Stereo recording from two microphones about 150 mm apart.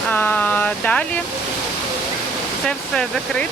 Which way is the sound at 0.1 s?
10° left (ahead or behind).